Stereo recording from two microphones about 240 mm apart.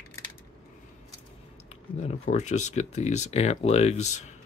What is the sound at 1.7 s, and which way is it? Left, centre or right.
Speech, left.